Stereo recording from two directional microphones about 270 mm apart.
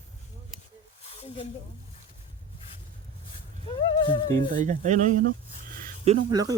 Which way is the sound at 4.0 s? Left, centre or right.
Centre.